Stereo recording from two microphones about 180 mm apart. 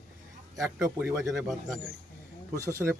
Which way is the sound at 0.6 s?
15° right (ahead or behind).